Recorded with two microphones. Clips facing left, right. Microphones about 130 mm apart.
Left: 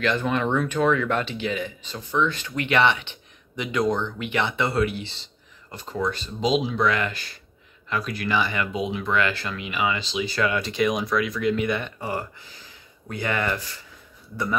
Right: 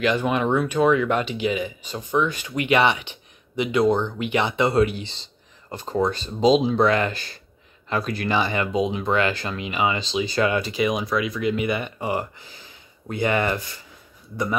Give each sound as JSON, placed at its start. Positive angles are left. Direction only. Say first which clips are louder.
{"t": 0.0, "sound": "speech", "louder": "right 2 dB", "side_deg": -15}
{"t": 3.6, "sound": "speech", "louder": "right 4 dB", "side_deg": -30}
{"t": 4.2, "sound": "speech", "louder": "right 3 dB", "side_deg": -15}
{"t": 5.7, "sound": "speech", "louder": "right 4 dB", "side_deg": -35}
{"t": 10.6, "sound": "speech", "louder": "even", "side_deg": -5}